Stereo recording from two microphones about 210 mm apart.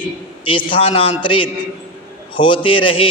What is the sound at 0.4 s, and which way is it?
A man's voice, 25° left (ahead or behind).